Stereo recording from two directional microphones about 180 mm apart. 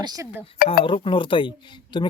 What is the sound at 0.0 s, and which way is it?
Speech, 20° right (ahead or behind).